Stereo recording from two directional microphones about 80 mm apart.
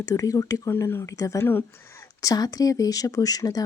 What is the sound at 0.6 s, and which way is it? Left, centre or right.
Speech, left.